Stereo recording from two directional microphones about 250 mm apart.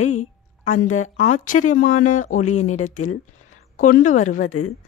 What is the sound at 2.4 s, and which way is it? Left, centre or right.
Speech, left.